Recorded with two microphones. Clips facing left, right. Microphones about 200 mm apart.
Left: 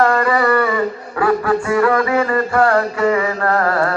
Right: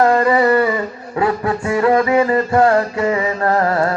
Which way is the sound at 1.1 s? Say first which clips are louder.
Left 1 dB; 20° right (ahead or behind).